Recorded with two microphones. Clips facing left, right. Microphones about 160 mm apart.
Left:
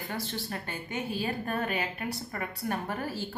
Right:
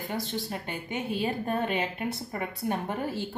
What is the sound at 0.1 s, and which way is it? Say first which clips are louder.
A woman's voice: right 3 dB; 20° right (ahead or behind).